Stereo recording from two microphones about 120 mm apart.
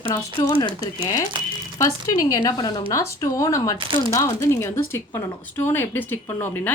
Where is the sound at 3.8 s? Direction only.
40° right (ahead or behind).